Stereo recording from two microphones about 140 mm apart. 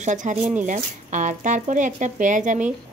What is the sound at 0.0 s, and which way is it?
Speech, 60° right (ahead or behind).